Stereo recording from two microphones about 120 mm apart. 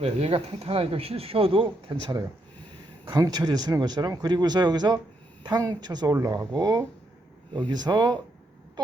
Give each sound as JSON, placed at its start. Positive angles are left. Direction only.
{"t": 0.0, "sound": "speech", "side_deg": -60}